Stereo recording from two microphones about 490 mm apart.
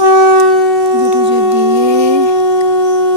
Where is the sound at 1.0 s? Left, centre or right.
Right.